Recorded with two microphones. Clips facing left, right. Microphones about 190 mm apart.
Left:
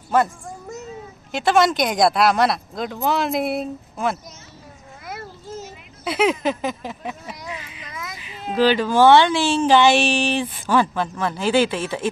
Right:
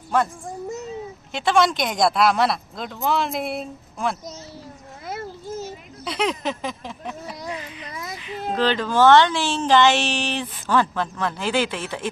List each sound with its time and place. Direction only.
0.1 s a woman's voice: 5° left (ahead or behind)
1.3 s a woman's voice: 5° left (ahead or behind)
6.0 s a woman's voice: 5° left (ahead or behind)
7.4 s speech: 40° right (ahead or behind)
7.8 s baby cry: 35° right (ahead or behind)
8.3 s a child's voice: 50° right (ahead or behind)
8.5 s speech: 10° left (ahead or behind)